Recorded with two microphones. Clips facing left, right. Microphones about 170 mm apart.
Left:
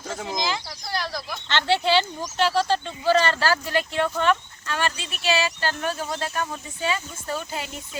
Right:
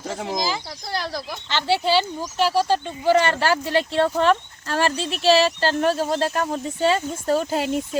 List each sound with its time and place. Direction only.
0.3 s speech: 5° right (ahead or behind)
0.9 s speech: 30° right (ahead or behind)
1.5 s speech: 5° right (ahead or behind); by 7.7 s 40° right (ahead or behind)